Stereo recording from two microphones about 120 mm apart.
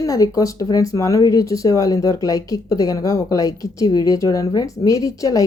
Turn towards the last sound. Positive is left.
turn(degrees=30)  # may be behind; listen again after turning